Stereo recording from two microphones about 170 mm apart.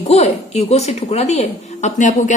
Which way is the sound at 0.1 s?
40° left (ahead or behind).